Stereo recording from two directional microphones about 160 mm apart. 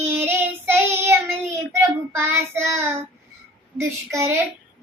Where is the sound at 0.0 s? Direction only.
15° right (ahead or behind).